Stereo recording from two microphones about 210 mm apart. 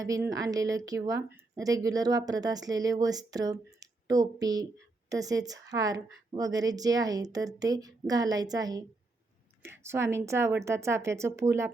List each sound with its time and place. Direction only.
0.3 s speech: 15° right (ahead or behind)